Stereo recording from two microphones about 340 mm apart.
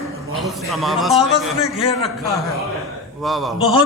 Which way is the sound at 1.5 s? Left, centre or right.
Centre.